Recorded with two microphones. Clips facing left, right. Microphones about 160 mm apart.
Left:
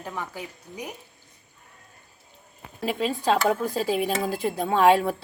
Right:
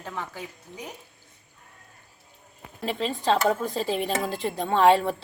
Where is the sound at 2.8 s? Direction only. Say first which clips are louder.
Left 2 dB; 10° left (ahead or behind).